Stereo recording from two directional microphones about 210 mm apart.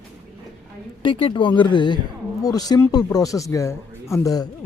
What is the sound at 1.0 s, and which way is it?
Speech, 25° left (ahead or behind).